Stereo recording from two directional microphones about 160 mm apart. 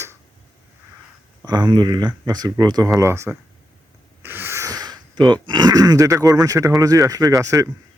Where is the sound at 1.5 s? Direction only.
25° right (ahead or behind).